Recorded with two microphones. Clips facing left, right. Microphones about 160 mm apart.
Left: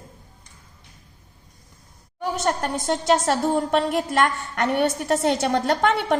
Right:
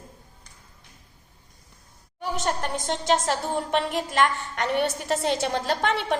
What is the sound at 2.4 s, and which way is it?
A woman's voice, 50° left (ahead or behind).